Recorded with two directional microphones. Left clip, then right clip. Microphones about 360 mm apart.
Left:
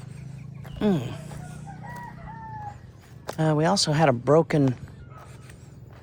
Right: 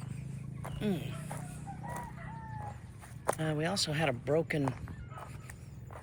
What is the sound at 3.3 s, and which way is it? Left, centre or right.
Speech, centre.